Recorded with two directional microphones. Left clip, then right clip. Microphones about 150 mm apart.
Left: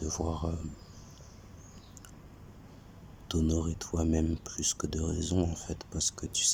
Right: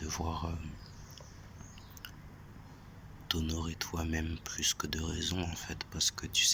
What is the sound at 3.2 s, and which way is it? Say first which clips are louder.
Speech: left 4 dB; 35° left (ahead or behind).